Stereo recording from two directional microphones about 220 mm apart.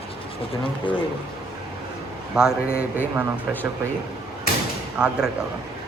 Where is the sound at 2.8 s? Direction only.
10° right (ahead or behind).